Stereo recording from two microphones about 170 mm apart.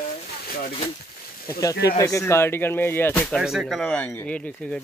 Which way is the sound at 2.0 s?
15° left (ahead or behind).